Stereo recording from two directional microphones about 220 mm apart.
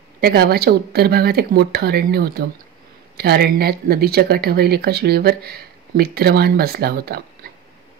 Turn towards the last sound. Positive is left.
turn(degrees=-45)  # may be behind; listen again after turning